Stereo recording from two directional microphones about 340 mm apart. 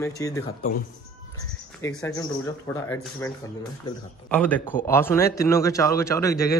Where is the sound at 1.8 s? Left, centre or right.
Centre.